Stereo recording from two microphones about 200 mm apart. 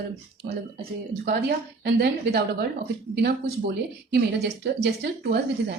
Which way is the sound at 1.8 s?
55° right (ahead or behind).